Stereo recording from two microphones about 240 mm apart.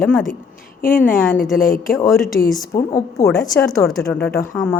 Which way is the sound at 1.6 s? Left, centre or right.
Left.